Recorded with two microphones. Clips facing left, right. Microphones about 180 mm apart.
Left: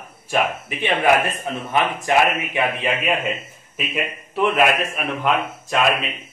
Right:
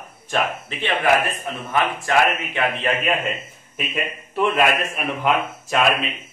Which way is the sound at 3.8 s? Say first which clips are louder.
Left 1 dB; centre (ahead or behind).